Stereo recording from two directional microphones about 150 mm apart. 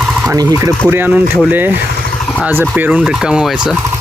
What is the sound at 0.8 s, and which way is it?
Speech, 10° right (ahead or behind).